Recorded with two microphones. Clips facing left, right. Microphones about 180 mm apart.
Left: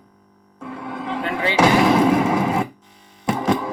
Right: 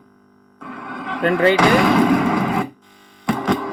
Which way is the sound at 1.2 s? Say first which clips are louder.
Right 11 dB; 50° right (ahead or behind).